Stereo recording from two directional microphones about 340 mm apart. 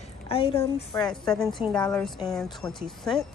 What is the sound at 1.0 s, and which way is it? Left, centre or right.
A woman's voice, centre.